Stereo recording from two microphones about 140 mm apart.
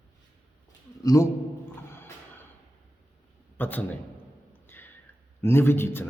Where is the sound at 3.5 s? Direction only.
15° left (ahead or behind).